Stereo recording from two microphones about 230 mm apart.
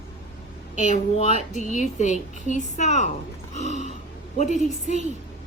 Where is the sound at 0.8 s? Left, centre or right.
Left.